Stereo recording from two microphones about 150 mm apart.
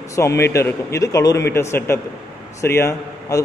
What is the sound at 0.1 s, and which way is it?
A man's voice, 20° left (ahead or behind).